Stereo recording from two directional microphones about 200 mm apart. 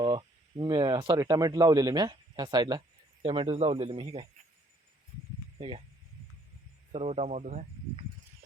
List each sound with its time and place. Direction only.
0.0 s speech: 25° right (ahead or behind)
5.5 s speech: 25° right (ahead or behind)
6.9 s speech: 30° right (ahead or behind)